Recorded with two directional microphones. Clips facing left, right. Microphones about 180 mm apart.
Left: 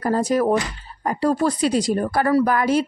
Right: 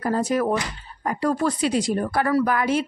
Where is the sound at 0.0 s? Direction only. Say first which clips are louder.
Left 3 dB; 40° left (ahead or behind).